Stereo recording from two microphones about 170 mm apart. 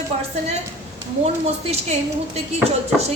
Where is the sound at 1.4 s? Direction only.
40° right (ahead or behind).